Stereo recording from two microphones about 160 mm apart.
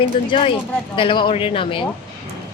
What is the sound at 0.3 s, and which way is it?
Speech, 30° left (ahead or behind).